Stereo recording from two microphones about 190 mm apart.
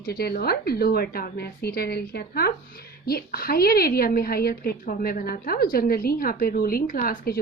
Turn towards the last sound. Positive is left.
turn(degrees=50)  # may be behind; listen again after turning